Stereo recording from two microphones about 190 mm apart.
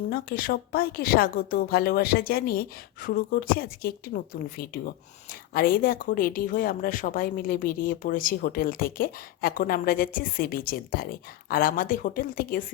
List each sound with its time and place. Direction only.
0.1 s speech: 50° left (ahead or behind)